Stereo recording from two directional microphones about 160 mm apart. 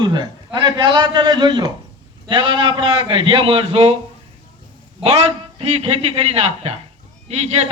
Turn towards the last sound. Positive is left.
turn(degrees=-40)  # may be behind; listen again after turning